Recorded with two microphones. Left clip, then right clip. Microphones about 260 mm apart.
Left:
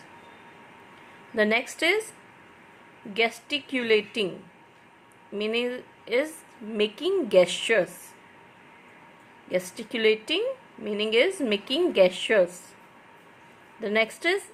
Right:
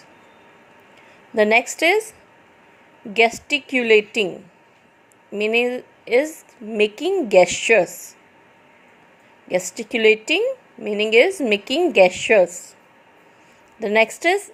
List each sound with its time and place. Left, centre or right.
1.4 s a woman's voice: right
3.1 s a woman's voice: right
5.3 s a woman's voice: right
9.5 s a woman's voice: right
13.7 s a woman's voice: right